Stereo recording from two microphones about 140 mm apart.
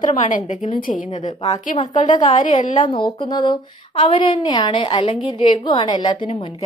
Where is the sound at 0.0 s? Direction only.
65° left (ahead or behind).